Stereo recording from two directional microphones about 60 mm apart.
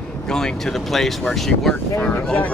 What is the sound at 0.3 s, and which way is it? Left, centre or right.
Speech, centre.